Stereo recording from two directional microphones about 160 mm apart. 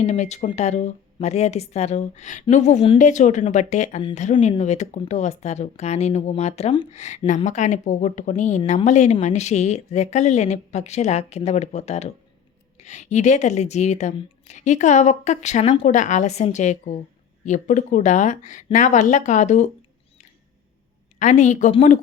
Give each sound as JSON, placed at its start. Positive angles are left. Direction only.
{"t": 0.0, "sound": "a woman's voice", "side_deg": 45}
{"t": 15.9, "sound": "a woman's voice", "side_deg": 50}
{"t": 21.2, "sound": "a woman's voice", "side_deg": 50}